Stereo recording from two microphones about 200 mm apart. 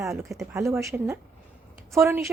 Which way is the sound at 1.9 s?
15° right (ahead or behind).